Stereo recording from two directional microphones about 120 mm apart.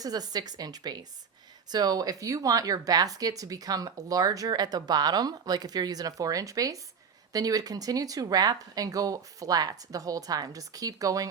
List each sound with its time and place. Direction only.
0.0 s speech: 35° right (ahead or behind)